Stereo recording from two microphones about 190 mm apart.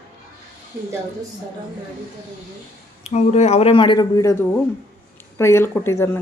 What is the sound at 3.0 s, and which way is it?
Speech, 35° left (ahead or behind).